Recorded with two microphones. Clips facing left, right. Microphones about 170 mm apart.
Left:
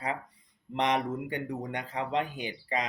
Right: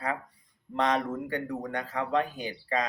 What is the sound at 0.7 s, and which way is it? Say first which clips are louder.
Speech: right 1 dB; 20° left (ahead or behind).